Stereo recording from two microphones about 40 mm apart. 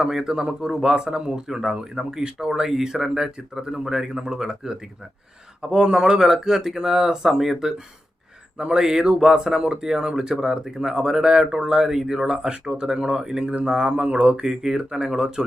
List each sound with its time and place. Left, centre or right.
0.0 s speech: centre
8.5 s speech: right
14.4 s speech: centre